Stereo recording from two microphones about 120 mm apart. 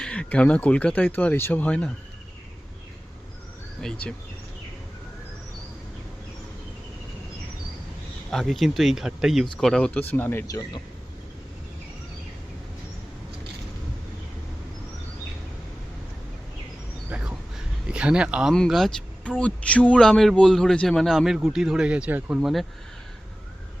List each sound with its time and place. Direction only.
0.0 s speech: 10° left (ahead or behind)
3.8 s a man's voice: 5° left (ahead or behind)
8.3 s a man's voice: centre (ahead or behind)
10.4 s a man's voice: 30° left (ahead or behind)
17.1 s a sound: 10° right (ahead or behind)
17.8 s speech: 10° right (ahead or behind)
18.5 s a man's voice: 5° left (ahead or behind)